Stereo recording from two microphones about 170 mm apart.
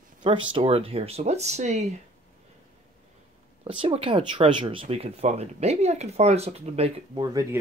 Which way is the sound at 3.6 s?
35° right (ahead or behind).